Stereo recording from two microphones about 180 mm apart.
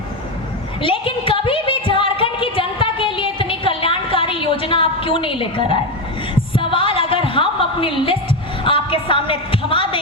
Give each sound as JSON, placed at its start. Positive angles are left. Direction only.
{"t": 0.8, "sound": "music", "side_deg": 30}
{"t": 6.5, "sound": "a sound", "side_deg": 30}
{"t": 8.6, "sound": "a woman's voice", "side_deg": 30}